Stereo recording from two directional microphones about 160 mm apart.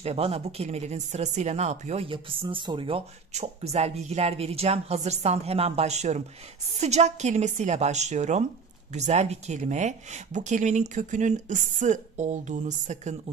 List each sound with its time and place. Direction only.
0.0 s speech: 40° right (ahead or behind)